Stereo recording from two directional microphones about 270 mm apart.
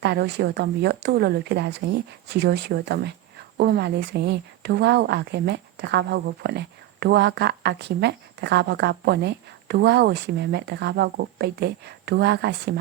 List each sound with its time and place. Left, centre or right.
0.0 s speech: right